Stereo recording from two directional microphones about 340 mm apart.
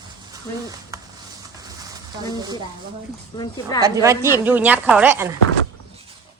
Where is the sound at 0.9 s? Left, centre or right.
Centre.